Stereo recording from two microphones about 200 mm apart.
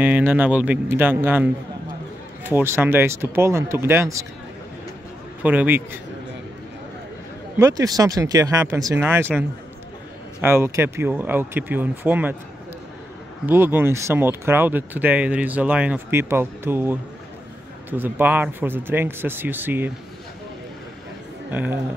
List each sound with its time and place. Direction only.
0.0 s speech: 10° right (ahead or behind)
5.4 s speech: 10° right (ahead or behind)
7.5 s speech: 15° right (ahead or behind)
13.5 s speech: 10° right (ahead or behind)
21.5 s speech: 10° right (ahead or behind)